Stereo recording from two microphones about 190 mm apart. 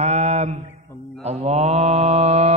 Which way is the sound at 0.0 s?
35° right (ahead or behind).